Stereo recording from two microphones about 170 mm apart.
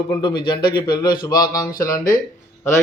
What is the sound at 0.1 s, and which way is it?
A man's voice, 25° left (ahead or behind).